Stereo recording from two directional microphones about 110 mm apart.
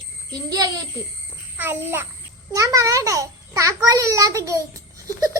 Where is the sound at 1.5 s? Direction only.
20° right (ahead or behind).